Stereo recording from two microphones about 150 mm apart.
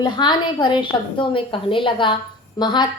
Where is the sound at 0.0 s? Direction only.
30° left (ahead or behind).